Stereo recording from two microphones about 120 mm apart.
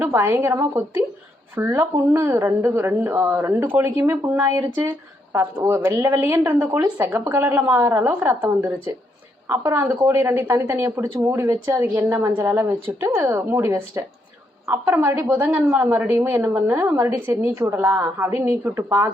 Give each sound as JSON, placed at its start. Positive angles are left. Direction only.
{"t": 0.0, "sound": "a woman's voice", "side_deg": -20}
{"t": 15.5, "sound": "a woman's voice", "side_deg": -15}